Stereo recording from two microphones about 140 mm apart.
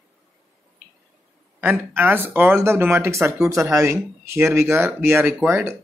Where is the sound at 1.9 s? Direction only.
15° right (ahead or behind).